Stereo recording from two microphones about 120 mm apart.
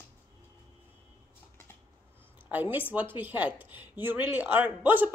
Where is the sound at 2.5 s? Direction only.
15° right (ahead or behind).